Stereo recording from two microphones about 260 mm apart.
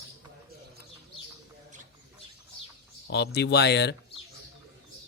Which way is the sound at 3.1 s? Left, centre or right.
Left.